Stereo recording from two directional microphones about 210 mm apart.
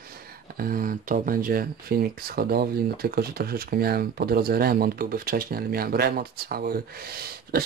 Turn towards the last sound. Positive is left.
turn(degrees=-45)  # may be behind; listen again after turning